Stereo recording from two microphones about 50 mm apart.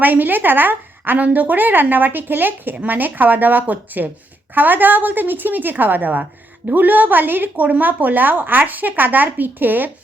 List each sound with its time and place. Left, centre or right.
0.0 s a woman's voice: right